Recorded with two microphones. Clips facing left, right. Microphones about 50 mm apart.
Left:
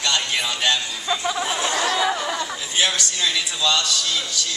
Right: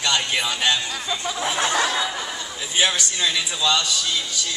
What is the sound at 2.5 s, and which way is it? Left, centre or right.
A man's voice, centre.